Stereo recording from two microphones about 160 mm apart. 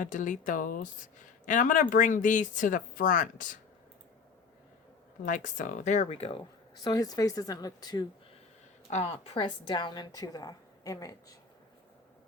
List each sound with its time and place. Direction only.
0.0 s speech: 55° left (ahead or behind)
5.2 s speech: 55° left (ahead or behind); by 6.4 s 35° left (ahead or behind)
6.8 s a woman's voice: 25° left (ahead or behind)
8.9 s a woman's voice: 40° left (ahead or behind); by 11.1 s 25° left (ahead or behind)